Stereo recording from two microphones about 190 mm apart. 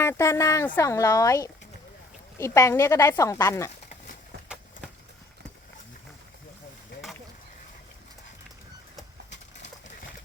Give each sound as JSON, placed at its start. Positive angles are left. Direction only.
{"t": 0.0, "sound": "a woman's voice", "side_deg": 15}